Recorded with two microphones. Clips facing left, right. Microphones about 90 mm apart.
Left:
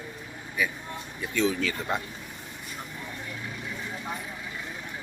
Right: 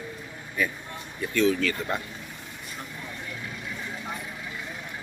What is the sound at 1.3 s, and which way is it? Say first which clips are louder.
Speech: right 3 dB; 15° left (ahead or behind).